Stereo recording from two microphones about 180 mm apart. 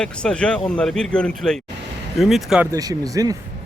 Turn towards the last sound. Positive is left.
turn(degrees=-20)  # may be behind; listen again after turning